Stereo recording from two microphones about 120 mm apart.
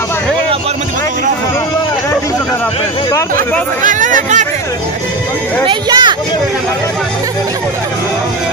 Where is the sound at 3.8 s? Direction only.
90° right.